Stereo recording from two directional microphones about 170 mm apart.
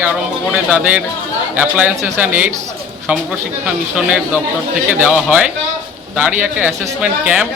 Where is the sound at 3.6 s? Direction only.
5° right (ahead or behind).